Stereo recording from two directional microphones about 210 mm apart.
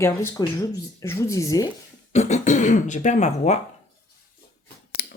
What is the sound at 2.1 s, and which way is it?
Speech, 35° left (ahead or behind).